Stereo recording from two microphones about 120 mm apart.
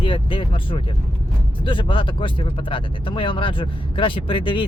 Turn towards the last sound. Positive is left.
turn(degrees=45)  # may be behind; listen again after turning